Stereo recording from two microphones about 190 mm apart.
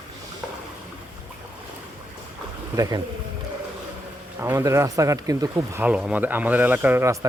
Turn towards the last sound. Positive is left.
turn(degrees=-15)  # may be behind; listen again after turning